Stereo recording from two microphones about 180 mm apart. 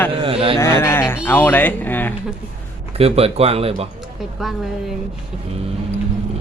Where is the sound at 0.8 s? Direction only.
15° left (ahead or behind).